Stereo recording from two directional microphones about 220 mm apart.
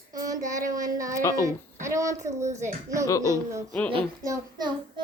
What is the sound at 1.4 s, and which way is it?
A child's voice, 15° right (ahead or behind).